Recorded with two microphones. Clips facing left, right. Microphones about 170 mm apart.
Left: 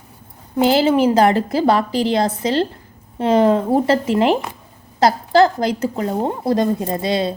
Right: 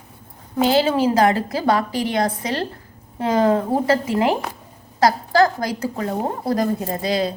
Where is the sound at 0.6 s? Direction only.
30° left (ahead or behind).